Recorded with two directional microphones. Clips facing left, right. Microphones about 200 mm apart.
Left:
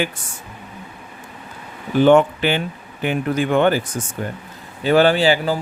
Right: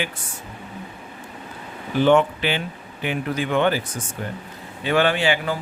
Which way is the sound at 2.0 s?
50° left (ahead or behind).